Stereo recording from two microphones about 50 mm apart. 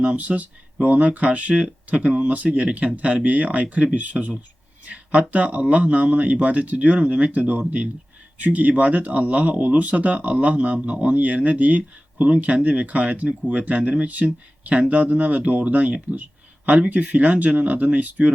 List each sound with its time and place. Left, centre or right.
0.0 s speech: right
5.3 s speech: right
14.2 s speech: centre
14.6 s speech: right